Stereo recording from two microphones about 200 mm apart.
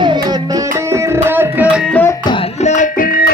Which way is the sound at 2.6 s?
40° left (ahead or behind).